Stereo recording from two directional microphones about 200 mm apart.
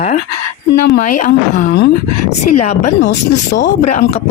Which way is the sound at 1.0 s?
40° left (ahead or behind).